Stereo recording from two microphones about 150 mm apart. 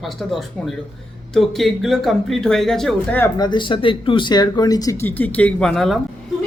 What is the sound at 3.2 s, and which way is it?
Speech, 30° left (ahead or behind).